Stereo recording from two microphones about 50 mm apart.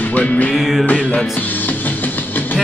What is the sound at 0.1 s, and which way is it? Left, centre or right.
Music, left.